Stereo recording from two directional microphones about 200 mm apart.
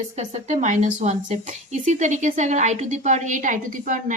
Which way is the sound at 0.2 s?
35° right (ahead or behind).